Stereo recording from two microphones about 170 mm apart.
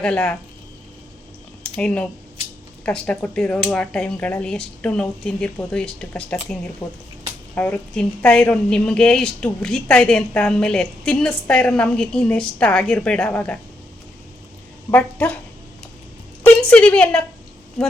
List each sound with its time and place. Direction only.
0.0 s speech: 5° left (ahead or behind)
1.6 s a woman's voice: 5° left (ahead or behind)
6.8 s speech: 20° left (ahead or behind)
7.5 s a woman's voice: 10° left (ahead or behind)
14.8 s speech: 10° left (ahead or behind)
16.4 s a woman's voice: 10° left (ahead or behind)